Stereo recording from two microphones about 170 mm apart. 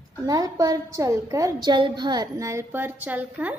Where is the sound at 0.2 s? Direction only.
20° right (ahead or behind).